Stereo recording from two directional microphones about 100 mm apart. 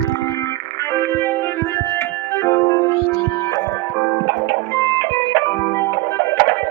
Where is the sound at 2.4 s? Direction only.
20° left (ahead or behind).